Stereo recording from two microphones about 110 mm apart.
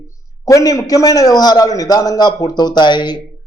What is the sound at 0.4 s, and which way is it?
A man's voice, 35° left (ahead or behind).